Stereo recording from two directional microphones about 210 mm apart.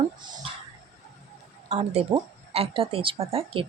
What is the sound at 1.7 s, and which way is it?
Speech, 30° right (ahead or behind).